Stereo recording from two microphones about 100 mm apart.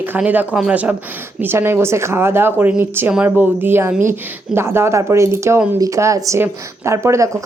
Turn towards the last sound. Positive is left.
turn(degrees=-30)  # may be behind; listen again after turning